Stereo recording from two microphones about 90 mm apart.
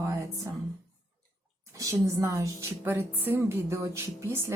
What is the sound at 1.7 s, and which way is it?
A woman's voice, 40° right (ahead or behind).